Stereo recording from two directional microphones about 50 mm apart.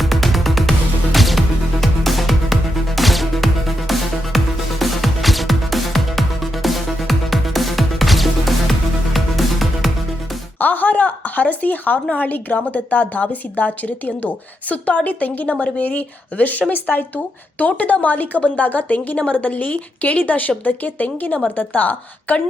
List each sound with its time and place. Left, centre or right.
0.0 s music: centre
10.6 s a woman's voice: left
17.7 s a woman's voice: left